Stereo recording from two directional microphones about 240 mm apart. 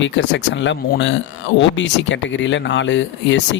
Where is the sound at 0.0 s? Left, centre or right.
Left.